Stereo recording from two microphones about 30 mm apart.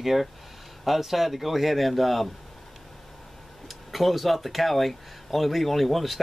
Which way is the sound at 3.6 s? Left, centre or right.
Centre.